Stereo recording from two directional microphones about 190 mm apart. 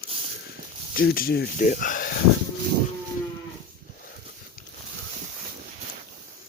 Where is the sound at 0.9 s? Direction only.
50° left (ahead or behind).